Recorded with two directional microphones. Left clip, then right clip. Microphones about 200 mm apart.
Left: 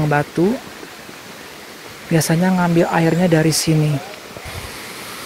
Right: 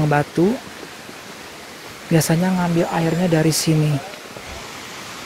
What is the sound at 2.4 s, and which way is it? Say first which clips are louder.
Speech: left 4 dB; 15° left (ahead or behind).